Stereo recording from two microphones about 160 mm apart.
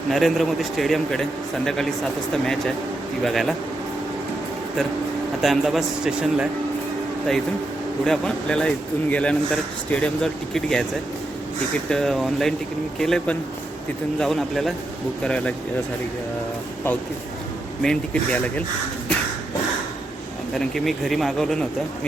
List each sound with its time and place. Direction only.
0.1 s speech: centre (ahead or behind)
3.2 s speech: centre (ahead or behind)
5.4 s speech: centre (ahead or behind)
8.0 s speech: 5° left (ahead or behind)
11.9 s speech: 5° left (ahead or behind)
17.8 s speech: 5° left (ahead or behind)
20.6 s speech: centre (ahead or behind)